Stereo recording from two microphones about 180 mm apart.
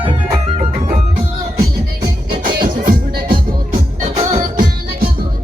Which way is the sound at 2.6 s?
50° right (ahead or behind).